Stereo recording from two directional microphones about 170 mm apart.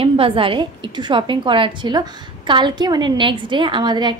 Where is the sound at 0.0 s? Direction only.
30° right (ahead or behind).